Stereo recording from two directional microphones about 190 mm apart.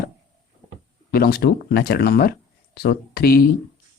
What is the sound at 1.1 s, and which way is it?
Speech, 55° left (ahead or behind).